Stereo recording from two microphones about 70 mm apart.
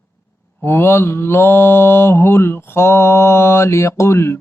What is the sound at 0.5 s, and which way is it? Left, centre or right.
Mantra, left.